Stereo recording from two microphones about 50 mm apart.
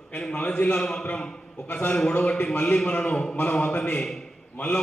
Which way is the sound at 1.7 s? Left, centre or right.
Left.